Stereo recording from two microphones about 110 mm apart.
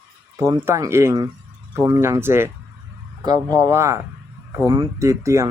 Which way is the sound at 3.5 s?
30° right (ahead or behind).